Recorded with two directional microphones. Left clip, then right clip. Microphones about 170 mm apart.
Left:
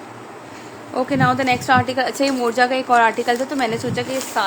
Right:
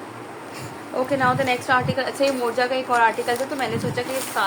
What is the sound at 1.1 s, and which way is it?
A woman's voice, 65° left (ahead or behind).